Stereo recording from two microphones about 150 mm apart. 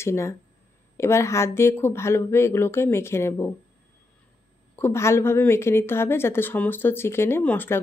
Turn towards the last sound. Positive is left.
turn(degrees=15)  # may be behind; listen again after turning